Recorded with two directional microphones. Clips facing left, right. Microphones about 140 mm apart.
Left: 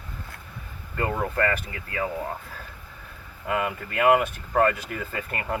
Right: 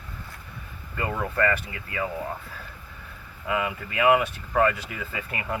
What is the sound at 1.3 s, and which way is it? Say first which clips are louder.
Speech: right 1 dB; 40° left (ahead or behind).